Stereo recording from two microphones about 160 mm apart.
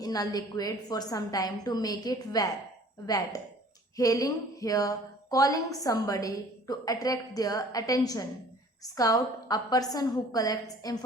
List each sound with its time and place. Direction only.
0.0 s a woman's voice: 25° left (ahead or behind)